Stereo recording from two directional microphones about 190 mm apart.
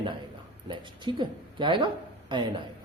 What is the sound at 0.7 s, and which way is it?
A man's voice, 25° right (ahead or behind).